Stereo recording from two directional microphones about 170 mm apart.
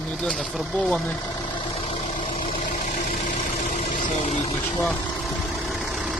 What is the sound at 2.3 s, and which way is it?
Vehicle, 30° left (ahead or behind).